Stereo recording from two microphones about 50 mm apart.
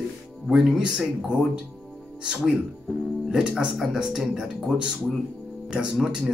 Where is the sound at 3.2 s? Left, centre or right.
Centre.